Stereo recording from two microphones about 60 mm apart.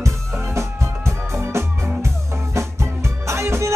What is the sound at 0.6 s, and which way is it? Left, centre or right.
Music, right.